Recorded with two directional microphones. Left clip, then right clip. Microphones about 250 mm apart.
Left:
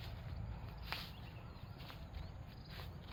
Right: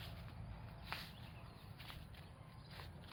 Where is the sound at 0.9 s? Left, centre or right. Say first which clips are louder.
Left 3 dB; centre.